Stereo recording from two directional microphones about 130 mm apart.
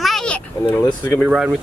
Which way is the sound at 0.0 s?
5° left (ahead or behind).